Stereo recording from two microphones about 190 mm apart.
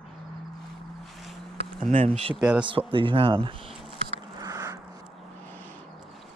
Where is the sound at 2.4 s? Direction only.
5° right (ahead or behind).